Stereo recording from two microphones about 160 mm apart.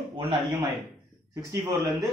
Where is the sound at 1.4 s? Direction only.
20° right (ahead or behind).